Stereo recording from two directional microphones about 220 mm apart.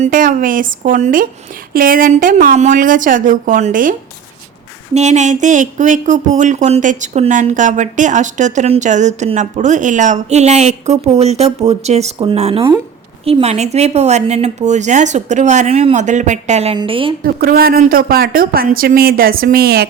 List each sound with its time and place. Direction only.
0.0 s speech: 40° right (ahead or behind)
4.9 s speech: 30° right (ahead or behind)
17.2 s speech: 45° right (ahead or behind)